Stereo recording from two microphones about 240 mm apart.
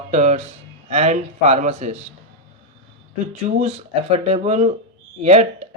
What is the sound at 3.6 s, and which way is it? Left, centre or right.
Speech, right.